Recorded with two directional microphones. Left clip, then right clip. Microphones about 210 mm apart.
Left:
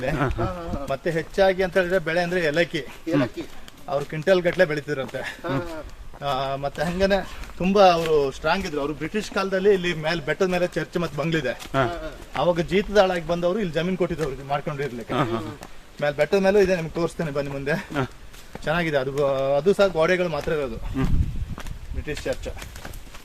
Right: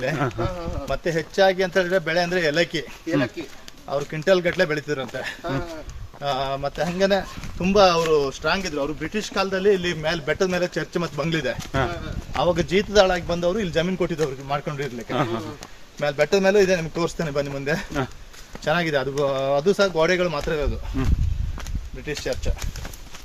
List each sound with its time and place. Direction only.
0.2 s speech: 5° left (ahead or behind)
0.9 s speech: 25° right (ahead or behind)
3.1 s speech: centre (ahead or behind)
3.8 s a man's voice: 15° right (ahead or behind)
22.0 s a man's voice: 40° right (ahead or behind)